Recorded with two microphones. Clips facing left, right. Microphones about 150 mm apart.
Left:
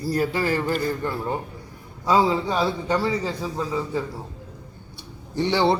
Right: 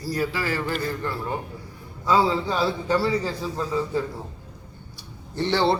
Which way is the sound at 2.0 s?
20° left (ahead or behind).